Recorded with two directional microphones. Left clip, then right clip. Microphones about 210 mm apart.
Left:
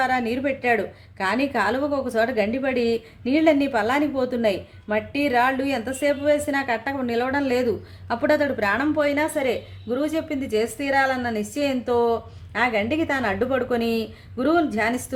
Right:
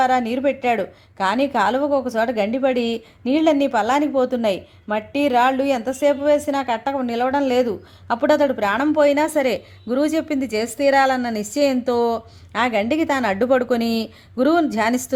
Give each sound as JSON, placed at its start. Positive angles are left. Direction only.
{"t": 0.0, "sound": "a woman's voice", "side_deg": -30}